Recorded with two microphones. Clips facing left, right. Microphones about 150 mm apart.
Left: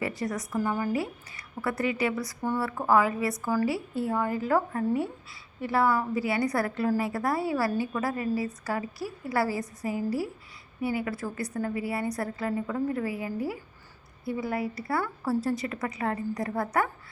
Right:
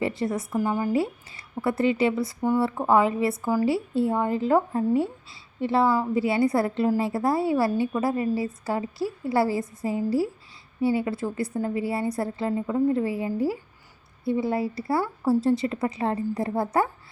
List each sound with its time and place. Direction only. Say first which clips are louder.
0.0 s a woman's voice: right 5 dB; 25° right (ahead or behind)